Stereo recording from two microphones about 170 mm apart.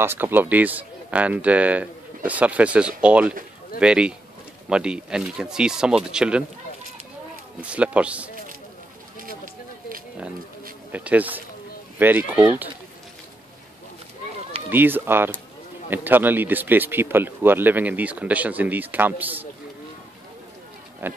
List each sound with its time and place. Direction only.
0.0 s speech: 15° right (ahead or behind)
7.6 s speech: 5° right (ahead or behind)
9.2 s a sound: 55° right (ahead or behind)
10.9 s speech: 10° right (ahead or behind)
14.7 s speech: 10° right (ahead or behind)
21.0 s speech: 15° right (ahead or behind)